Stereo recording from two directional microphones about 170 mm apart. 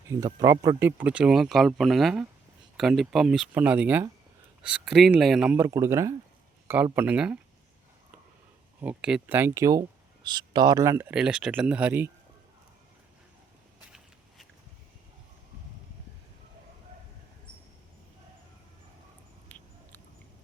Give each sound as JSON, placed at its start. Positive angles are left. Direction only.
{"t": 0.3, "sound": "speech", "side_deg": -20}
{"t": 5.5, "sound": "speech", "side_deg": -15}
{"t": 8.8, "sound": "speech", "side_deg": -5}
{"t": 19.5, "sound": "a sound", "side_deg": 10}